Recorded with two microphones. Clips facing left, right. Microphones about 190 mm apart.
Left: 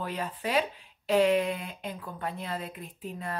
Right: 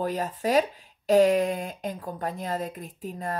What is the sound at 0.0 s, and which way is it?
Speech, 40° right (ahead or behind).